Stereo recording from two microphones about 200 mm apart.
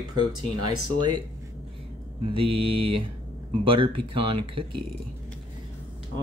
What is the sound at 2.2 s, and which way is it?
Speech, 25° right (ahead or behind).